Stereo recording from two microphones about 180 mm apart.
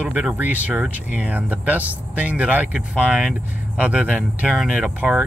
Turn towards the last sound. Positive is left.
turn(degrees=-5)  # may be behind; listen again after turning